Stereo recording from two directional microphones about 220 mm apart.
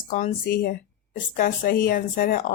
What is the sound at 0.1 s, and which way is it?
Speech, 35° left (ahead or behind).